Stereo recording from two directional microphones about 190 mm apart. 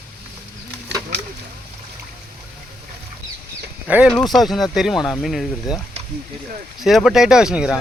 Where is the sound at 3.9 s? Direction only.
5° right (ahead or behind).